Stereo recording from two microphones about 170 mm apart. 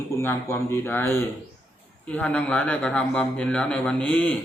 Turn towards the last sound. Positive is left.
turn(degrees=10)  # may be behind; listen again after turning